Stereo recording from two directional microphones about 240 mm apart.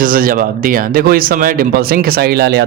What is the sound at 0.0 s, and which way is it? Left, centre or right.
A man's voice, right.